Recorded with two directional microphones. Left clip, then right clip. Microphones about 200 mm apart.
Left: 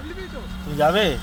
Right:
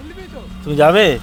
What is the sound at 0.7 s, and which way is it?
Speech, 35° right (ahead or behind).